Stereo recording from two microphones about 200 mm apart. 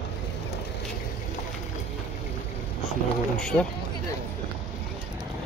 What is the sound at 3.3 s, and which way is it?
Speech, 5° left (ahead or behind).